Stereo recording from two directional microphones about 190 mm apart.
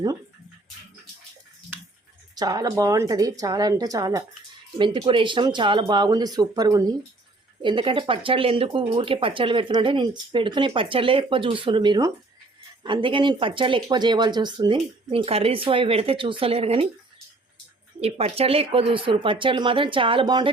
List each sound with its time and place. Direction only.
2.3 s speech: 20° right (ahead or behind)
18.0 s speech: 30° right (ahead or behind)